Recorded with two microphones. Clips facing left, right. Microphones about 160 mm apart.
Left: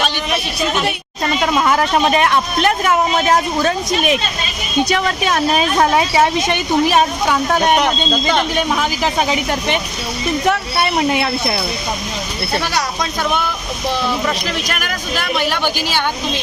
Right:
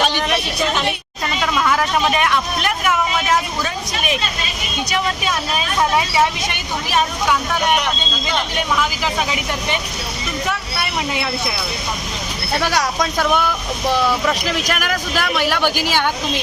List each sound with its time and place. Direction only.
1.4 s a man's voice: 35° left (ahead or behind)
4.9 s speech: 55° left (ahead or behind)
15.7 s a woman's voice: 10° right (ahead or behind)